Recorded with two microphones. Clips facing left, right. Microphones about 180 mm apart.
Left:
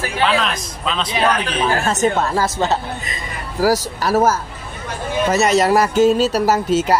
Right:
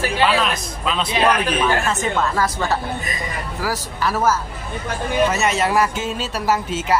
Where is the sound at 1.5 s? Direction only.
35° left (ahead or behind).